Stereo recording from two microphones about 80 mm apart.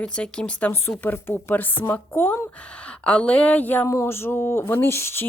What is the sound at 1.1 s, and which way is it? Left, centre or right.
Speech, left.